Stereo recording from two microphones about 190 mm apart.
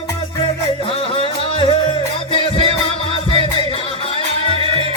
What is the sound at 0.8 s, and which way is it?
Music, 30° left (ahead or behind).